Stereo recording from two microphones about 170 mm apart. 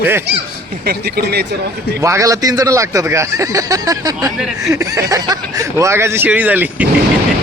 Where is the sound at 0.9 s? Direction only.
70° right (ahead or behind).